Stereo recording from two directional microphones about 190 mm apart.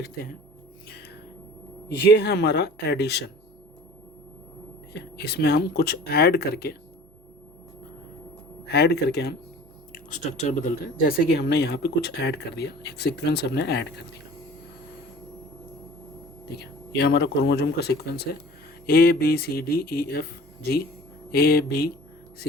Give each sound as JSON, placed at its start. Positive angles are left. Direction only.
{"t": 2.0, "sound": "speech", "side_deg": 60}
{"t": 4.9, "sound": "speech", "side_deg": 60}
{"t": 8.6, "sound": "speech", "side_deg": 60}
{"t": 9.9, "sound": "speech", "side_deg": 45}
{"t": 16.6, "sound": "speech", "side_deg": 60}
{"t": 21.3, "sound": "speech", "side_deg": 55}